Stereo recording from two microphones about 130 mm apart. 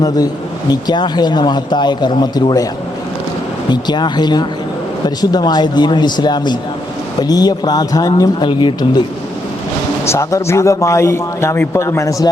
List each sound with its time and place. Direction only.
0.7 s speech: 35° left (ahead or behind)
3.7 s speech: 35° left (ahead or behind)
10.1 s a man's voice: 20° left (ahead or behind)